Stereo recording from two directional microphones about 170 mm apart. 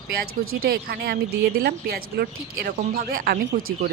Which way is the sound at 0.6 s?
65° right (ahead or behind).